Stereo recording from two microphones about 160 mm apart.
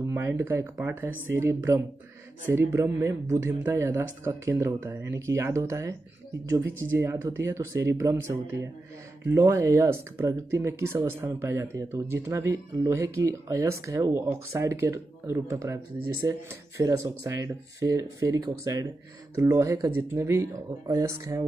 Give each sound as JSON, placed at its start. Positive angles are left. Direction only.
{"t": 0.0, "sound": "speech", "side_deg": -15}